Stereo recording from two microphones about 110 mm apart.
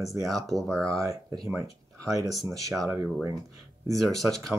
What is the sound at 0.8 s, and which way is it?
Speech, 30° right (ahead or behind).